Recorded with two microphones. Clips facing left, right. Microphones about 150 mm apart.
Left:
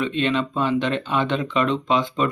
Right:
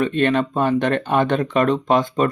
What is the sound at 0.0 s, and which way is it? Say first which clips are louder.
Speech: right 4 dB; 50° right (ahead or behind).